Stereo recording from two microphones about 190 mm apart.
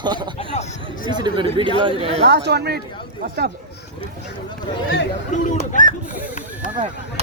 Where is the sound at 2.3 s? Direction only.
60° right (ahead or behind).